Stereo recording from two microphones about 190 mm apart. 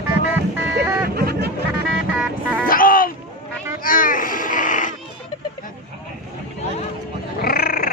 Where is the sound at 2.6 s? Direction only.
50° left (ahead or behind).